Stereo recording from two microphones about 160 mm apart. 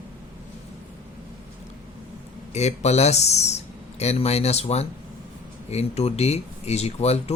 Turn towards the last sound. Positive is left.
turn(degrees=40)  # may be behind; listen again after turning